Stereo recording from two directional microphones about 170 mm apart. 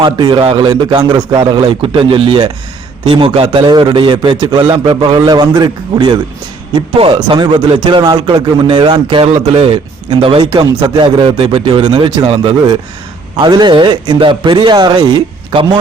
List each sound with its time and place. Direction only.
0.0 s a man's voice: 25° right (ahead or behind)